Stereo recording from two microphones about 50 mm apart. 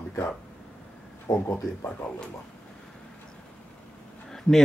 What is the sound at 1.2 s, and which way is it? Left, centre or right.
Speech, left.